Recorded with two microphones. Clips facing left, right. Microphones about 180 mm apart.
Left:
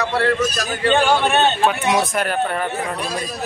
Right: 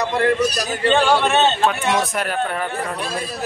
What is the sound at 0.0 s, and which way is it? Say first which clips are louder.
Speech: right 1 dB; 15° right (ahead or behind).